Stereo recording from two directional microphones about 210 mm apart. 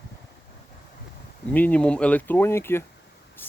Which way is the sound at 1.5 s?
5° left (ahead or behind).